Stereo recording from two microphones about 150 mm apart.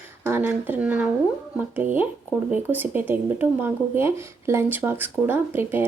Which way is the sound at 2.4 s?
10° right (ahead or behind).